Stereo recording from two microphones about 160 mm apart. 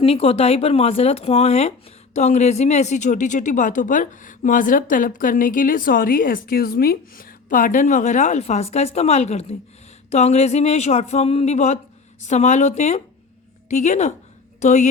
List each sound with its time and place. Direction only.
0.0 s a woman's voice: 35° left (ahead or behind)